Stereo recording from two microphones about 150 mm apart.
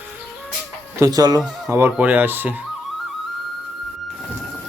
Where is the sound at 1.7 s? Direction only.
10° right (ahead or behind).